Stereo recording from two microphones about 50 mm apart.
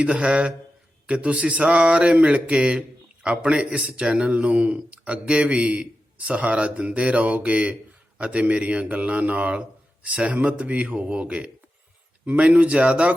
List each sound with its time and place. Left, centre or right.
0.0 s a man's voice: right